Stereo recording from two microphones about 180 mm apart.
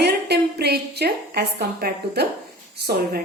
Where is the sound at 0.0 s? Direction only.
65° right (ahead or behind).